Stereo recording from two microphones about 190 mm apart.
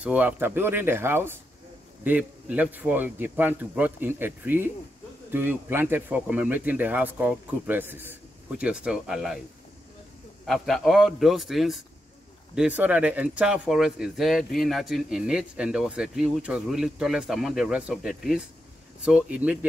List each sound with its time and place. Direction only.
0.0 s speech: 5° right (ahead or behind)
10.4 s speech: centre (ahead or behind)